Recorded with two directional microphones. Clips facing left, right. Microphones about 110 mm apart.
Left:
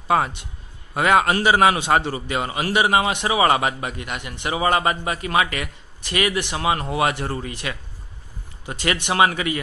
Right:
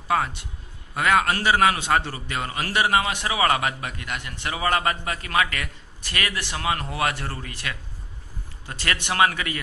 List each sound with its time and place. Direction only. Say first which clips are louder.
0.1 s a man's voice: left 4 dB; 20° left (ahead or behind)